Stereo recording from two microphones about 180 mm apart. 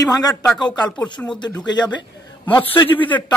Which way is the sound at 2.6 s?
10° left (ahead or behind).